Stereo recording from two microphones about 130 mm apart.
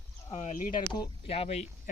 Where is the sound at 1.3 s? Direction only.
55° left (ahead or behind).